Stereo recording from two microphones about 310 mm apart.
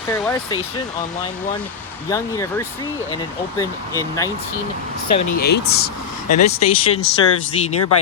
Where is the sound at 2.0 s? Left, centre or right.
Centre.